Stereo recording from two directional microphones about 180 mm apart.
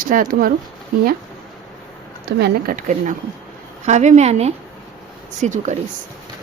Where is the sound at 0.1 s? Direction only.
50° right (ahead or behind).